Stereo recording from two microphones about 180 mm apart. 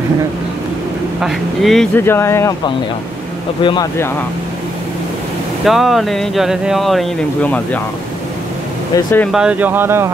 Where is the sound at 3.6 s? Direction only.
25° left (ahead or behind).